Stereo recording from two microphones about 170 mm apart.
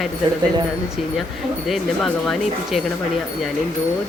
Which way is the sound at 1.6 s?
Centre (ahead or behind).